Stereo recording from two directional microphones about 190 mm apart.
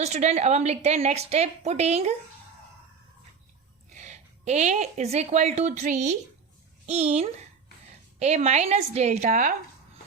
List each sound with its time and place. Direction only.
0.0 s a woman's voice: 35° right (ahead or behind)
3.9 s a woman's voice: 40° right (ahead or behind)